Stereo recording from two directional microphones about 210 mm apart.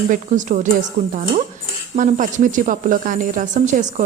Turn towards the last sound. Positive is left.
turn(degrees=-35)  # may be behind; listen again after turning